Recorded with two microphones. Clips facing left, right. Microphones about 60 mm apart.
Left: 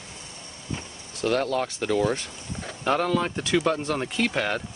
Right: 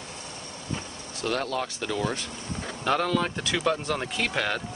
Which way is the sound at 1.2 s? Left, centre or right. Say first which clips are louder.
Left 4 dB; left.